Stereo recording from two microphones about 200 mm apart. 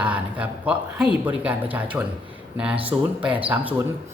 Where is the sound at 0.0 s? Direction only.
5° right (ahead or behind).